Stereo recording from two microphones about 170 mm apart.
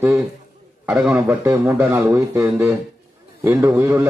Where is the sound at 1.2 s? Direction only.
15° right (ahead or behind).